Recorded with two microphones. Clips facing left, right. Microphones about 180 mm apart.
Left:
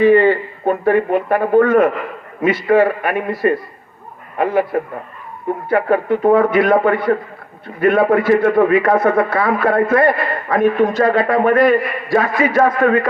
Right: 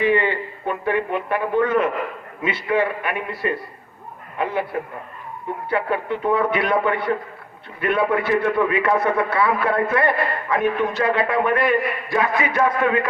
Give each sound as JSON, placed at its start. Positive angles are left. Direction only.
{"t": 0.0, "sound": "a man's voice", "side_deg": 40}